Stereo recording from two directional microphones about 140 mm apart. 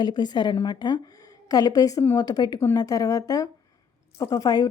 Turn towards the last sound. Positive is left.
turn(degrees=30)  # may be behind; listen again after turning